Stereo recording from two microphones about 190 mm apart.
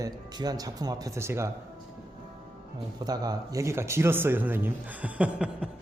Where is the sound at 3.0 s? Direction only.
20° right (ahead or behind).